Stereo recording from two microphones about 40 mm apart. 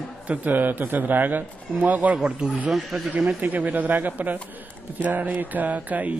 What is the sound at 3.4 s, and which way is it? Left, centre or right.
A man's voice, right.